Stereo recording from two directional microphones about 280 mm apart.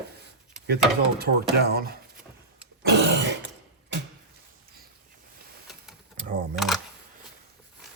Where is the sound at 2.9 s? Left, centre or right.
Right.